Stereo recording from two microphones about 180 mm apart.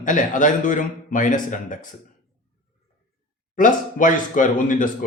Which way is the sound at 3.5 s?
45° left (ahead or behind).